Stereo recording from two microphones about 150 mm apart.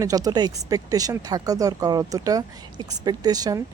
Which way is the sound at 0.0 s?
25° right (ahead or behind).